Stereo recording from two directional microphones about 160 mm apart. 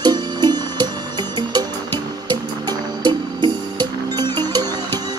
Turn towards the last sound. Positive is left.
turn(degrees=-25)  # may be behind; listen again after turning